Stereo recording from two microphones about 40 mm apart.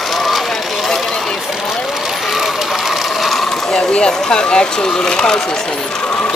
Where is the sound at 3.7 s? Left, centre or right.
Left.